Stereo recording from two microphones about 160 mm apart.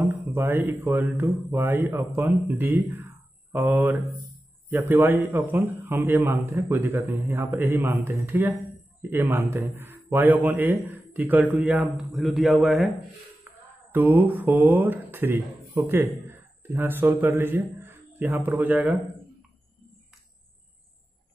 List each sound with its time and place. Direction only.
0.0 s a sound: 15° right (ahead or behind)
0.8 s a man's voice: 15° right (ahead or behind)
13.5 s music: 10° right (ahead or behind)
13.9 s speech: 15° right (ahead or behind)